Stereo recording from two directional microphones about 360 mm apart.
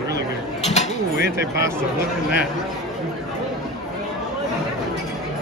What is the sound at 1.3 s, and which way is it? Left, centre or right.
Speech, centre.